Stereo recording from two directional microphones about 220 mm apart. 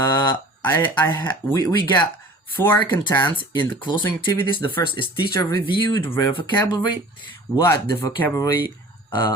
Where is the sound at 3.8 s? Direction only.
20° left (ahead or behind).